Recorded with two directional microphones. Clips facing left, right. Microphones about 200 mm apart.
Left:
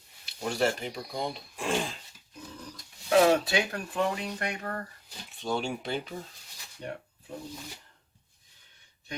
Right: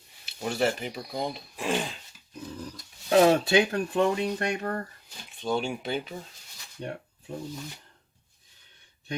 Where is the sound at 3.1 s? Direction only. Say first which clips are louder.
Right 3 dB; 30° right (ahead or behind).